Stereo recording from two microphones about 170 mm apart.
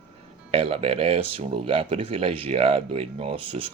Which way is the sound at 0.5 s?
35° right (ahead or behind).